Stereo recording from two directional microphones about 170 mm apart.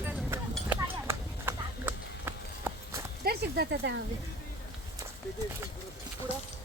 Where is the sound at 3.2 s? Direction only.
70° right (ahead or behind).